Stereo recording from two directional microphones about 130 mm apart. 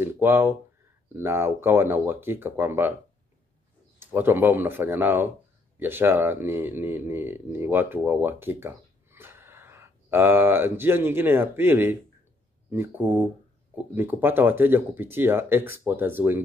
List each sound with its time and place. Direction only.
0.0 s speech: 20° right (ahead or behind)
4.0 s speech: 15° right (ahead or behind)